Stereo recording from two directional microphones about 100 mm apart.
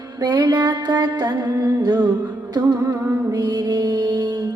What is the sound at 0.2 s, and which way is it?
Music, 40° right (ahead or behind).